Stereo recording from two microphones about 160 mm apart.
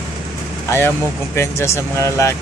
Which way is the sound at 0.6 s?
15° left (ahead or behind).